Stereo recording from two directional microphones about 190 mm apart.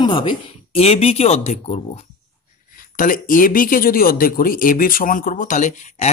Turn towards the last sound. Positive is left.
turn(degrees=40)  # may be behind; listen again after turning